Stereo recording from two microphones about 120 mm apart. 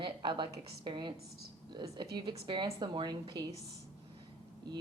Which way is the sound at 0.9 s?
40° right (ahead or behind).